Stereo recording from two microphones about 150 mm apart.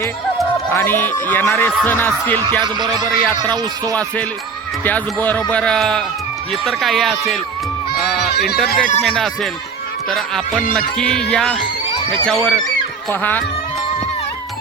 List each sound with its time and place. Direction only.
0.7 s speech: 15° left (ahead or behind)
2.5 s speech: 30° right (ahead or behind)
4.8 s speech: 10° left (ahead or behind)
8.5 s speech: centre (ahead or behind)